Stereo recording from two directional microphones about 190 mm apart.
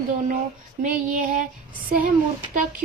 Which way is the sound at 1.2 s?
45° right (ahead or behind).